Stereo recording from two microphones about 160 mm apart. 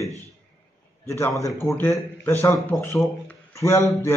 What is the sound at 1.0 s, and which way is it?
A man's voice, 15° left (ahead or behind).